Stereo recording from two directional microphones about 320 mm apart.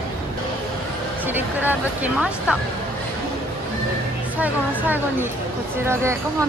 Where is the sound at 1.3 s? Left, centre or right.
Centre.